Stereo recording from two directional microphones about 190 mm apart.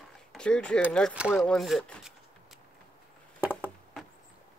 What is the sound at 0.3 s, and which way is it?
Speech, 5° left (ahead or behind).